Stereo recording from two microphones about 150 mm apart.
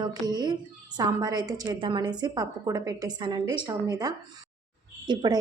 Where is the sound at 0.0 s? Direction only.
25° right (ahead or behind).